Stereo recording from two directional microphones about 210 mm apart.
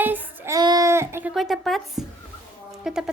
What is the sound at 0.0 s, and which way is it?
Child singing, 10° right (ahead or behind).